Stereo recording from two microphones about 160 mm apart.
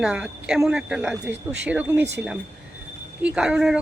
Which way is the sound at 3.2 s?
5° right (ahead or behind).